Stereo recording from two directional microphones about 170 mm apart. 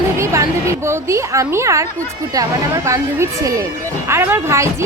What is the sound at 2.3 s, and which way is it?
Speech, 20° right (ahead or behind).